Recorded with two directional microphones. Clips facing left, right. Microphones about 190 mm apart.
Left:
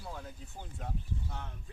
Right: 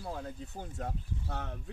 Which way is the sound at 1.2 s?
70° right (ahead or behind).